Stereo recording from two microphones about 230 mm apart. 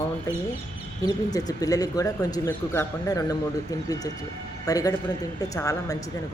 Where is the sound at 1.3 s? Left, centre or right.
Centre.